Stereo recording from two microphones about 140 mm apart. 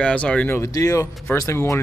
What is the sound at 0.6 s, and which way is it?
Speech, 25° left (ahead or behind).